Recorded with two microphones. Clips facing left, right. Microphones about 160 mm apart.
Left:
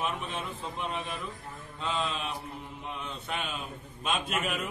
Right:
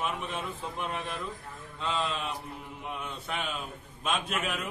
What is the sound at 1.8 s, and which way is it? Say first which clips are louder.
Speech: right 1 dB; 5° left (ahead or behind).